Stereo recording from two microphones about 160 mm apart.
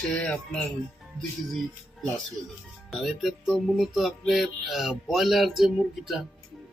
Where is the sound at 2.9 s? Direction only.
Centre (ahead or behind).